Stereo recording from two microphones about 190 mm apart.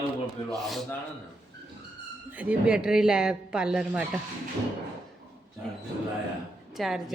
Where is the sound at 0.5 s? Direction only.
Centre (ahead or behind).